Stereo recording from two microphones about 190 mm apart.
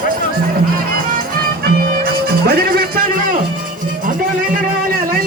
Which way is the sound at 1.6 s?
55° right (ahead or behind).